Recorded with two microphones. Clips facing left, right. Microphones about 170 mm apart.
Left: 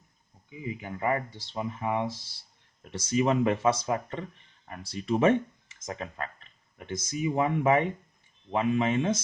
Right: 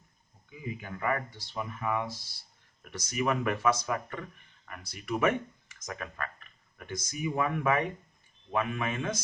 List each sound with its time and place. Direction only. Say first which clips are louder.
0.5 s speech: left 3 dB; 20° left (ahead or behind)